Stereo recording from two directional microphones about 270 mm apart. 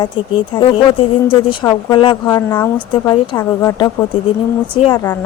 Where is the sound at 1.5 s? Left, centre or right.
Centre.